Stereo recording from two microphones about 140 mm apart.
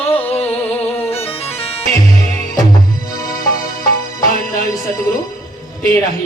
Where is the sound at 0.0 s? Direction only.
15° left (ahead or behind).